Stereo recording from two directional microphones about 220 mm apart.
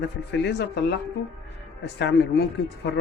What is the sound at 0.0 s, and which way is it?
Speech, 50° left (ahead or behind).